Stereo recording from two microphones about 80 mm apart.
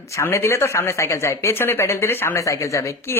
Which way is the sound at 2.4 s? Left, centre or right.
Left.